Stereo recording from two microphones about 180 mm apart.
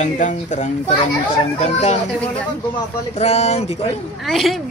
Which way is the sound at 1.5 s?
40° left (ahead or behind).